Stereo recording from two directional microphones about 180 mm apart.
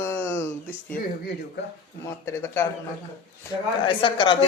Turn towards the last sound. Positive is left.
turn(degrees=25)  # may be behind; listen again after turning